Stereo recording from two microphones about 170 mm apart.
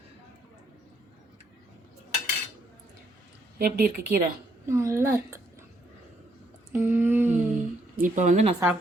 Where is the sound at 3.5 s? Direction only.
60° right (ahead or behind).